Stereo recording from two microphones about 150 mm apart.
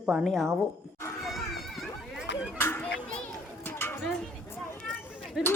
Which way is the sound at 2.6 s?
15° left (ahead or behind).